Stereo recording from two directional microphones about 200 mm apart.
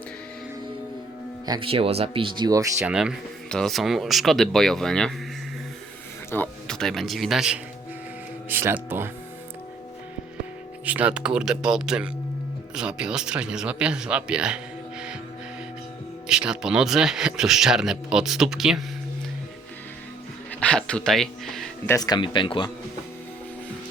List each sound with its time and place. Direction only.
1.6 s speech: 30° right (ahead or behind)
2.9 s speech: 5° right (ahead or behind)
6.3 s speech: 5° left (ahead or behind); by 9.0 s 10° right (ahead or behind)
10.8 s speech: 5° right (ahead or behind)
16.3 s speech: 5° right (ahead or behind)
20.6 s speech: 5° left (ahead or behind)
21.9 s speech: 20° left (ahead or behind)